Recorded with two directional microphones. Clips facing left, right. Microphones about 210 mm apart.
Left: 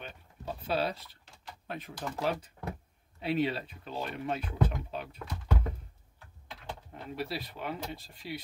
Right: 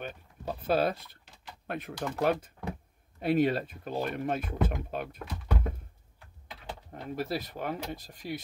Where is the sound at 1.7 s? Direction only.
60° right (ahead or behind).